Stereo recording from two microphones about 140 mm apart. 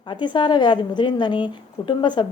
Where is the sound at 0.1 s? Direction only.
35° left (ahead or behind).